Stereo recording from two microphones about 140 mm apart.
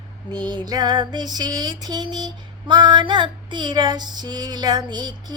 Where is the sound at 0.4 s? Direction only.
30° right (ahead or behind).